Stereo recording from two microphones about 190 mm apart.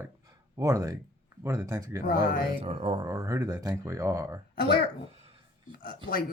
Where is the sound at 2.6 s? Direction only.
30° right (ahead or behind).